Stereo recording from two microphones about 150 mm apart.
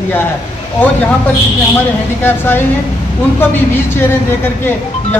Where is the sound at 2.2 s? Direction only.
15° left (ahead or behind).